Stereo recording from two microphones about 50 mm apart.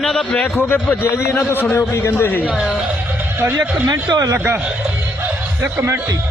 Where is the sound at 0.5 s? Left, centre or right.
Left.